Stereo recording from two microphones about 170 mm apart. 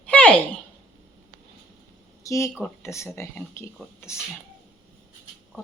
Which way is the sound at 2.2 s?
20° left (ahead or behind).